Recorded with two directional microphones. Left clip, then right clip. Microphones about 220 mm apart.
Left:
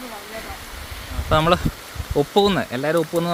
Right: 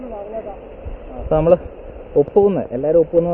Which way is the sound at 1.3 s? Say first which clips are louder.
Right 4 dB; 25° left (ahead or behind).